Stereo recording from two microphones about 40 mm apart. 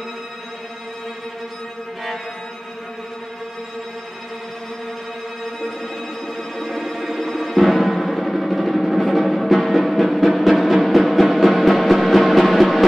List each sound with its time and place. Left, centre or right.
6.6 s music: centre